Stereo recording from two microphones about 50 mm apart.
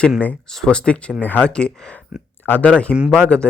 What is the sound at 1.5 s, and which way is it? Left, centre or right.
Speech, centre.